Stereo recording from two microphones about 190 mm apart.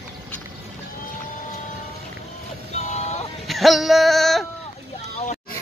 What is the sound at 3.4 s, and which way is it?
Music, centre (ahead or behind).